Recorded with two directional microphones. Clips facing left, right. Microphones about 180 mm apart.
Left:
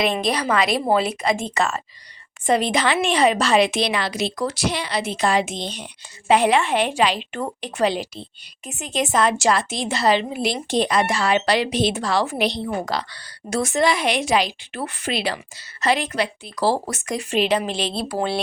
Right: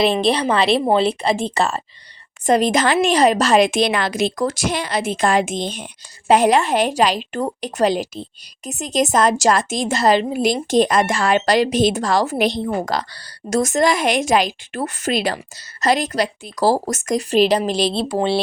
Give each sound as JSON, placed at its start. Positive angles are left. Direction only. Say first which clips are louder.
{"t": 0.0, "sound": "a woman's voice", "louder": "right 5 dB", "side_deg": -30}
{"t": 18.1, "sound": "speech", "louder": "right 4 dB", "side_deg": -25}